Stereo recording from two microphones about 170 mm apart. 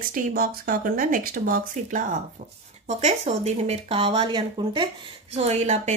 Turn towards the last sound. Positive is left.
turn(degrees=-40)  # may be behind; listen again after turning